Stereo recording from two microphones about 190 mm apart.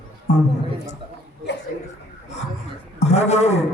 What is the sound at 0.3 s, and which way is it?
Speech, 35° left (ahead or behind).